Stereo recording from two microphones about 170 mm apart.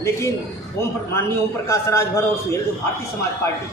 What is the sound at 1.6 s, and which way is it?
Speech, 15° left (ahead or behind).